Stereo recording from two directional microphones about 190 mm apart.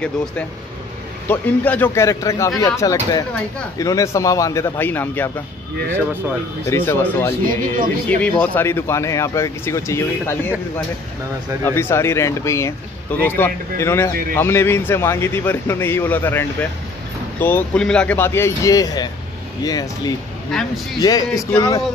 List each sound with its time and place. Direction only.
1.3 s speech: 10° left (ahead or behind)
6.6 s speech: 15° left (ahead or behind)
7.4 s speech: 45° right (ahead or behind)
8.2 s speech: 10° left (ahead or behind)
11.6 s speech: 15° left (ahead or behind)
20.5 s speech: centre (ahead or behind)
21.0 s speech: 20° left (ahead or behind)